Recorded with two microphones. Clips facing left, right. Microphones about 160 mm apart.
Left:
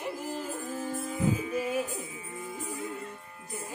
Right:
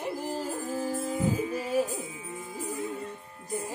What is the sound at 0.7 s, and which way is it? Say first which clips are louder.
Music: right 4 dB; 35° right (ahead or behind).